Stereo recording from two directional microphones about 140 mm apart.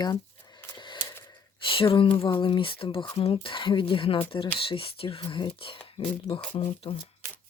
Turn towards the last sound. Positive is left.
turn(degrees=45)  # may be behind; listen again after turning